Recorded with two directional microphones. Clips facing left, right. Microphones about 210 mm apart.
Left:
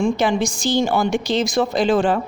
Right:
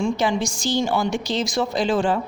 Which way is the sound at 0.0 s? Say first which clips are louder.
Left 3 dB; 55° left (ahead or behind).